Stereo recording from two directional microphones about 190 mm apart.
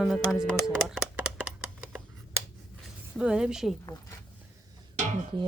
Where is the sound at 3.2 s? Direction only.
5° right (ahead or behind).